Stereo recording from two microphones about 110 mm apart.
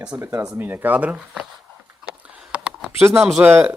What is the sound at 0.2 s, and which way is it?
Speech, 30° right (ahead or behind).